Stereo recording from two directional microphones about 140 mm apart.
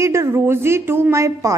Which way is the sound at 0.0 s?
20° right (ahead or behind).